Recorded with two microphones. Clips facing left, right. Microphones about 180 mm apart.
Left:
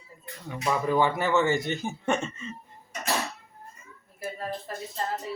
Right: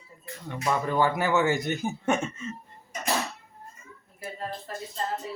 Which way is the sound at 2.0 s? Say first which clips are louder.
Right 1 dB; centre (ahead or behind).